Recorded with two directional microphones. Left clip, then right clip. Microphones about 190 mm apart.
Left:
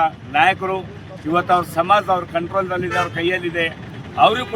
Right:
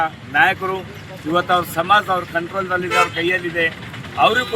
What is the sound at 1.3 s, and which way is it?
Speech, 20° left (ahead or behind).